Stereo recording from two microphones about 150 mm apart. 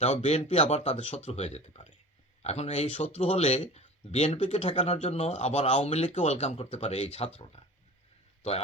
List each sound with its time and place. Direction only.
0.0 s speech: 45° left (ahead or behind)